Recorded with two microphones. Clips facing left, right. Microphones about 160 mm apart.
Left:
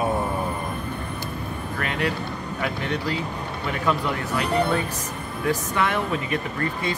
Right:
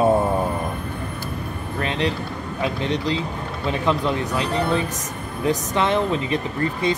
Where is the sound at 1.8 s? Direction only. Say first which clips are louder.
Right 3 dB; 25° right (ahead or behind).